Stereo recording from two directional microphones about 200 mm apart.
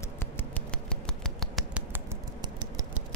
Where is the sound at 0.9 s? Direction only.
Centre (ahead or behind).